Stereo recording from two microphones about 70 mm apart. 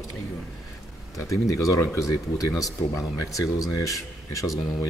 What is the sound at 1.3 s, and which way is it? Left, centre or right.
Speech, left.